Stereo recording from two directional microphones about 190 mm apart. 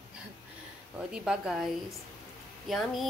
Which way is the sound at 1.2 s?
5° right (ahead or behind).